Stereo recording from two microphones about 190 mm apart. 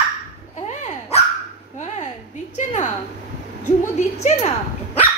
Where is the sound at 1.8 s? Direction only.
40° left (ahead or behind).